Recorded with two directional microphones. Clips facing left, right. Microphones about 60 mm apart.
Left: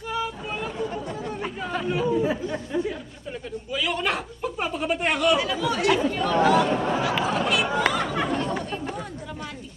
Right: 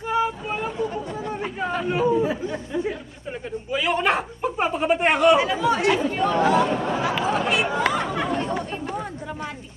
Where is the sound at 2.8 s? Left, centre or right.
Right.